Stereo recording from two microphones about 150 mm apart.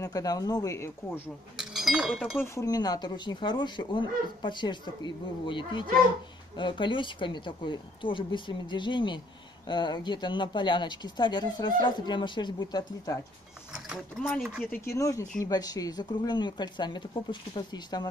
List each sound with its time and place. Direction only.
0.0 s speech: 25° left (ahead or behind)
1.6 s speech: centre (ahead or behind)
2.4 s speech: 20° left (ahead or behind)
14.4 s speech: 5° right (ahead or behind)
14.7 s speech: 20° left (ahead or behind)